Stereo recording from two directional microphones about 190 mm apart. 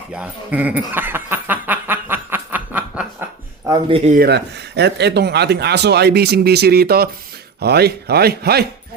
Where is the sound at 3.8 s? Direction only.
30° right (ahead or behind).